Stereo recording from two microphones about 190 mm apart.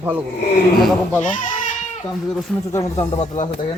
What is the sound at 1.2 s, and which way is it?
Speech, 45° left (ahead or behind).